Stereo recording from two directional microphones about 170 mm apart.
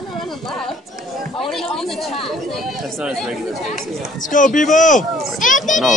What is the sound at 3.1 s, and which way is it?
Speech, centre (ahead or behind).